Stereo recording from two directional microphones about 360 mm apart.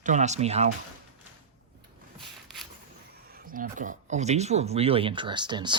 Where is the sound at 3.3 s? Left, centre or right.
Right.